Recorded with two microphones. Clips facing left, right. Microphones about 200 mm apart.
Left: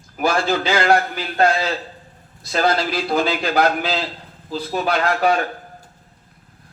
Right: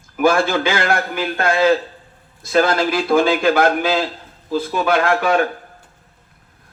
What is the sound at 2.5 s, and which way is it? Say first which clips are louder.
A man's voice: right 3 dB; 50° right (ahead or behind).